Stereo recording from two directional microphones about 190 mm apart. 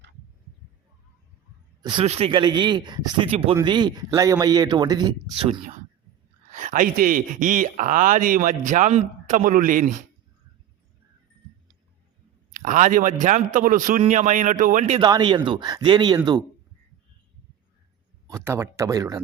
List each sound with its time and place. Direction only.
1.8 s speech: 30° right (ahead or behind)
6.5 s speech: 40° right (ahead or behind)
12.5 s speech: 40° right (ahead or behind)
15.0 s speech: 25° right (ahead or behind)
18.3 s speech: 15° right (ahead or behind)